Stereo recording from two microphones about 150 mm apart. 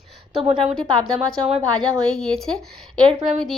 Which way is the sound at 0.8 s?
30° right (ahead or behind).